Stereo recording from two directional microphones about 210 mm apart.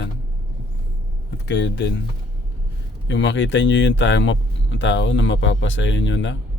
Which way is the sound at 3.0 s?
60° left (ahead or behind).